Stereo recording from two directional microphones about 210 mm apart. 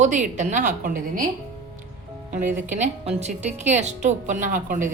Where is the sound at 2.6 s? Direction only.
35° right (ahead or behind).